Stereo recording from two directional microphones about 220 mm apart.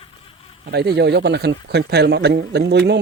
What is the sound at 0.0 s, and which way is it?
Insect, 25° left (ahead or behind).